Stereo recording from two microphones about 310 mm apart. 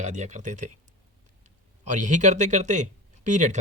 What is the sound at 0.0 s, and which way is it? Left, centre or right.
A man's voice, right.